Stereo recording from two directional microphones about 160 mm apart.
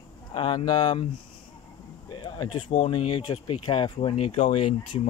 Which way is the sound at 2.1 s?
30° left (ahead or behind).